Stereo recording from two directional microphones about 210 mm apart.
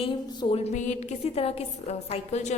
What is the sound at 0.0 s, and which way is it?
A woman's voice, 30° left (ahead or behind).